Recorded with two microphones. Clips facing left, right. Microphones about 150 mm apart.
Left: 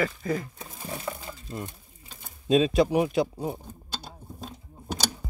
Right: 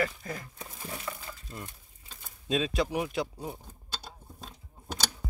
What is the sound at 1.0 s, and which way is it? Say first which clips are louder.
Crumpling: left 5 dB; 25° left (ahead or behind).